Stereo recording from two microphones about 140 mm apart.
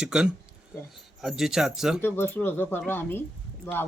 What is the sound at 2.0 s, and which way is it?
Speech, 15° left (ahead or behind).